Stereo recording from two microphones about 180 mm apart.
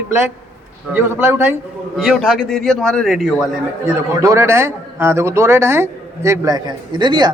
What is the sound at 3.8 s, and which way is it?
A man's voice, 15° right (ahead or behind).